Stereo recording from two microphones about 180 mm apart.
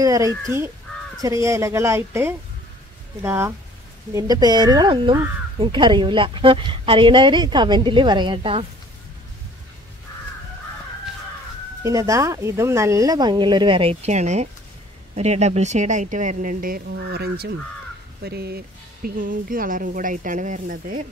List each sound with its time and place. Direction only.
0.0 s speech: 20° right (ahead or behind)
0.9 s crow: 5° left (ahead or behind)
1.2 s speech: 15° right (ahead or behind)
11.8 s speech: 20° right (ahead or behind); by 18.6 s 65° right (ahead or behind)
19.0 s speech: 50° right (ahead or behind)